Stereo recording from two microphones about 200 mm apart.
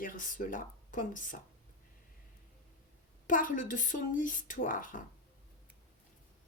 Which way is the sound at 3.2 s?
40° left (ahead or behind).